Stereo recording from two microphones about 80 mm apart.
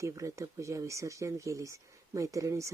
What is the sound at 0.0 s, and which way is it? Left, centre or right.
Speech, right.